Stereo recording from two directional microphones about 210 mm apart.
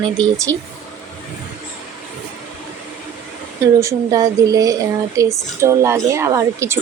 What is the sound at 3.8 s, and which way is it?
Speech, 15° right (ahead or behind).